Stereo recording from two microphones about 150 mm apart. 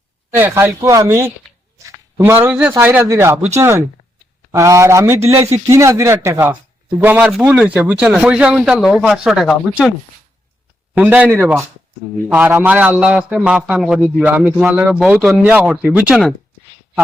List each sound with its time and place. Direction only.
0.3 s a man's voice: 15° right (ahead or behind)
10.9 s a man's voice: 10° right (ahead or behind)